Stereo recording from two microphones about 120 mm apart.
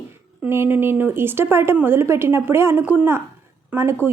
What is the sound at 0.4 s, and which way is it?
A woman's voice, 20° right (ahead or behind).